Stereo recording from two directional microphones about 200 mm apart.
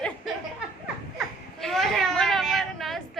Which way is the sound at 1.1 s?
Centre (ahead or behind).